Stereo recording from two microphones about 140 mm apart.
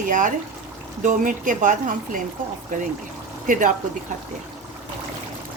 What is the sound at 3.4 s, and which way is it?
Speech, 70° right (ahead or behind).